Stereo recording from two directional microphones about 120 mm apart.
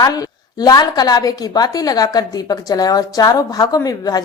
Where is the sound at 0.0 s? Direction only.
30° left (ahead or behind).